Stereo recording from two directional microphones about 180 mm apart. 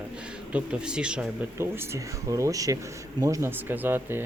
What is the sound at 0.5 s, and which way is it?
Speech, 5° right (ahead or behind).